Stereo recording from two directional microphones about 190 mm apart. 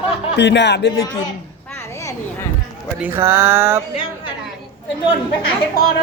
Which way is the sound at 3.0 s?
10° right (ahead or behind).